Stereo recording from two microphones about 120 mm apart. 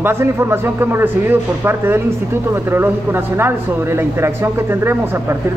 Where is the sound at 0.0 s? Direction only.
20° right (ahead or behind).